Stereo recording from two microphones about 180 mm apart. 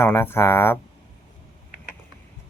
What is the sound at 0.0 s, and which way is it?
Speech, 15° left (ahead or behind).